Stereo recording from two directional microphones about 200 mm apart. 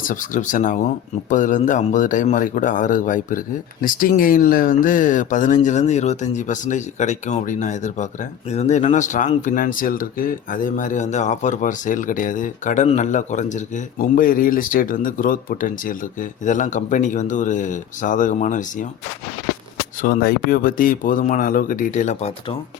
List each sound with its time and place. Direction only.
0.1 s speech: 40° left (ahead or behind)
20.0 s speech: 45° left (ahead or behind)